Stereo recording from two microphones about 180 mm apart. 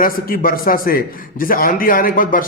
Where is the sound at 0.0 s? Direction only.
50° left (ahead or behind).